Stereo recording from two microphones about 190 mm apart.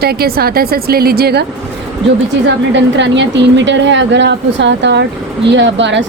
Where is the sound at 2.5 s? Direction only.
70° right (ahead or behind).